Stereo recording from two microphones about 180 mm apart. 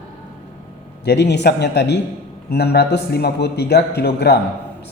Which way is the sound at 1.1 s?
70° left (ahead or behind).